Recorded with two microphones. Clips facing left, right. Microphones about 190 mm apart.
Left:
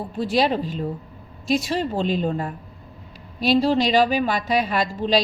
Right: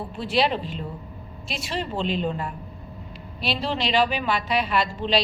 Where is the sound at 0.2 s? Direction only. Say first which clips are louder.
Left 3 dB; 45° left (ahead or behind).